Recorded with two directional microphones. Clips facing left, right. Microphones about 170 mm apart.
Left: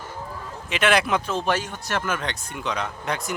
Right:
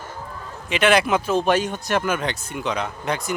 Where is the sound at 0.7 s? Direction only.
Centre (ahead or behind).